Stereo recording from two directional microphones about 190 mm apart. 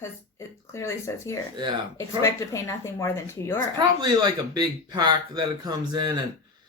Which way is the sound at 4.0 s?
20° right (ahead or behind).